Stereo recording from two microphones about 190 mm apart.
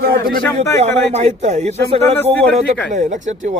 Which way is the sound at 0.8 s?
35° right (ahead or behind).